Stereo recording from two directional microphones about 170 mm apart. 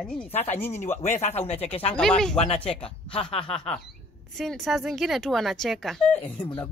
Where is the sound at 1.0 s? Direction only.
40° left (ahead or behind).